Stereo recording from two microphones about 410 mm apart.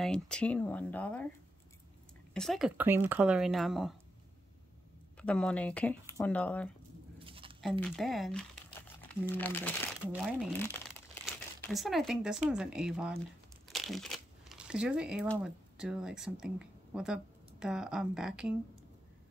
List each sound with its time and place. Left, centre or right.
0.0 s speech: centre
2.3 s speech: centre
5.1 s speech: centre
7.2 s a sound: centre
7.8 s speech: centre
11.7 s speech: centre